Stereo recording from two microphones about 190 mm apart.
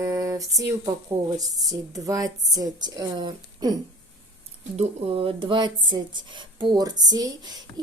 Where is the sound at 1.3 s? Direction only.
20° right (ahead or behind).